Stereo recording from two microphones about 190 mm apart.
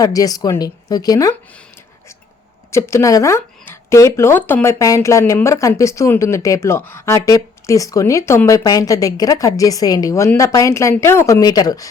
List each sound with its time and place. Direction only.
0.0 s speech: 20° left (ahead or behind)
2.7 s speech: 15° left (ahead or behind)